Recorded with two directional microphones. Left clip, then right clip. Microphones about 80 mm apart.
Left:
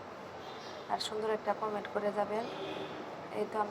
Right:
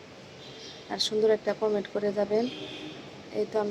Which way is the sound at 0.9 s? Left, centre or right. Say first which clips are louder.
Right 9 dB; right.